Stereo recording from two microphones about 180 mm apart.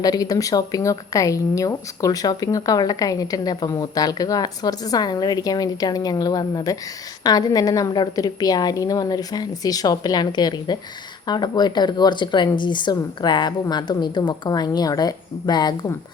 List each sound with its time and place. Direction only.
0.0 s speech: 20° left (ahead or behind)